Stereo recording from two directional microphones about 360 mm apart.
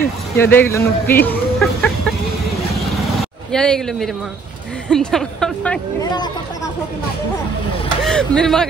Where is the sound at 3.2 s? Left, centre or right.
Centre.